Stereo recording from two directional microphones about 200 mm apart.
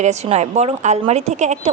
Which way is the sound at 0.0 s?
35° right (ahead or behind).